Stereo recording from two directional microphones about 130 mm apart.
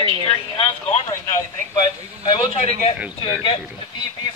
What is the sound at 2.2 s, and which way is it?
Speech, 45° left (ahead or behind).